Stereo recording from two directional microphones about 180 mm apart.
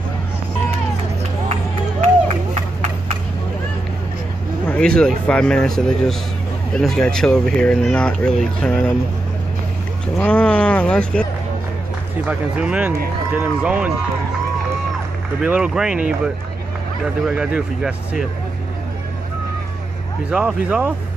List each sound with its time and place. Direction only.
4.6 s speech: 5° left (ahead or behind)
10.1 s speech: 5° left (ahead or behind)
12.3 s speech: 5° right (ahead or behind)
15.4 s speech: 5° right (ahead or behind)
20.2 s speech: 5° right (ahead or behind)